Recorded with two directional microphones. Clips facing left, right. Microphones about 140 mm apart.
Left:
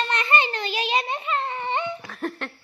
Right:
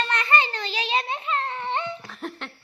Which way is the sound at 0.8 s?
5° left (ahead or behind).